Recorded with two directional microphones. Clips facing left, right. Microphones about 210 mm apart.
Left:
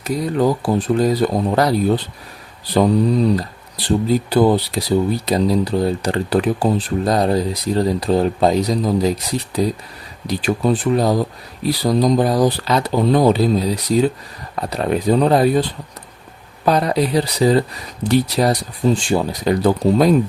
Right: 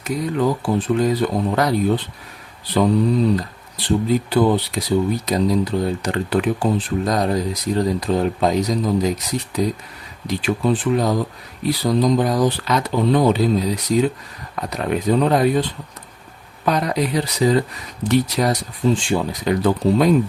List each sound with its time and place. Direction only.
0.0 s speech: 40° left (ahead or behind)
3.3 s speech: 35° left (ahead or behind)
16.6 s speech: 30° left (ahead or behind)